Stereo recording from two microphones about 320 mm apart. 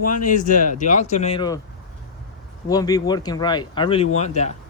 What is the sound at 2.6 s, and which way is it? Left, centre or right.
Speech, centre.